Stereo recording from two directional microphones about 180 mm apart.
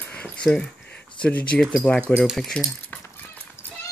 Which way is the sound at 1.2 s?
5° left (ahead or behind).